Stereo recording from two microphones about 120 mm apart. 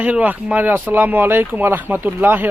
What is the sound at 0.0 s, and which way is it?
Speech, 10° right (ahead or behind).